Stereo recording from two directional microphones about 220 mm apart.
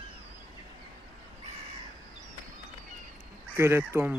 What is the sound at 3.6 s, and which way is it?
Speech, 10° right (ahead or behind).